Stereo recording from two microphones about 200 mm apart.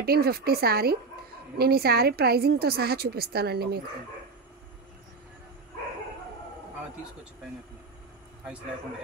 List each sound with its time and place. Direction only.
0.0 s a woman's voice: 50° right (ahead or behind)